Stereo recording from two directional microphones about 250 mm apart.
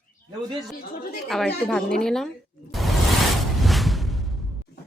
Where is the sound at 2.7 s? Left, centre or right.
Centre.